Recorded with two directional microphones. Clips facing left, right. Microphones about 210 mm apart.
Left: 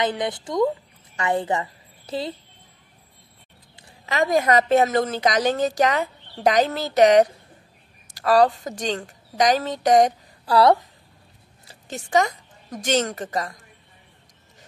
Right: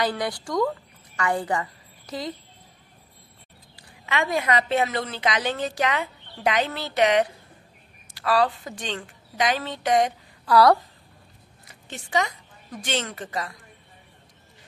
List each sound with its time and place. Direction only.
0.0 s a woman's voice: 20° left (ahead or behind)
4.0 s a woman's voice: 40° left (ahead or behind)
10.5 s speech: 25° left (ahead or behind)
11.6 s a woman's voice: 45° left (ahead or behind)